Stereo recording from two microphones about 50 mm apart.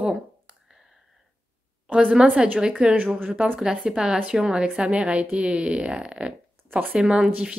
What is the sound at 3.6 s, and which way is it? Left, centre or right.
A woman's voice, centre.